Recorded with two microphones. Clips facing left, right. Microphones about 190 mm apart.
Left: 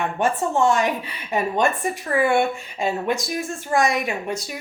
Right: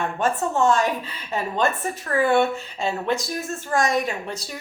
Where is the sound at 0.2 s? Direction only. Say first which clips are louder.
Left 1 dB; 15° left (ahead or behind).